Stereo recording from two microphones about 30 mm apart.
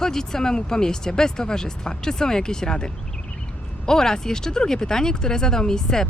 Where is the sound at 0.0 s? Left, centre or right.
Centre.